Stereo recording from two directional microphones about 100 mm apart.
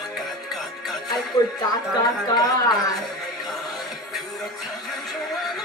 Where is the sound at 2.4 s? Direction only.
40° left (ahead or behind).